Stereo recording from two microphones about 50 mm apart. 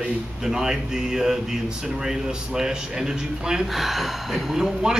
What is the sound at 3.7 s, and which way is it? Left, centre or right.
Speech, centre.